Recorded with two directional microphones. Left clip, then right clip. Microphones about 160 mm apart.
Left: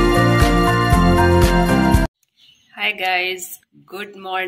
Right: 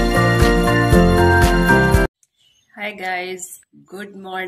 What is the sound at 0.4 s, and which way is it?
Music, centre (ahead or behind).